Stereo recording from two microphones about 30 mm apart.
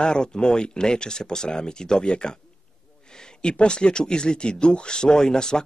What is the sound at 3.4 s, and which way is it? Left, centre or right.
Speech, left.